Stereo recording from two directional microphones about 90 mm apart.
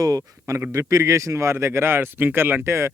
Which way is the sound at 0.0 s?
40° right (ahead or behind).